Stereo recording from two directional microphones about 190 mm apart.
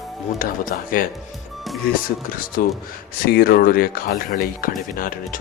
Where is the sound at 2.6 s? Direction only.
50° left (ahead or behind).